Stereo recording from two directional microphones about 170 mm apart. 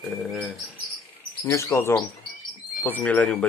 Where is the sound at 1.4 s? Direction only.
15° left (ahead or behind).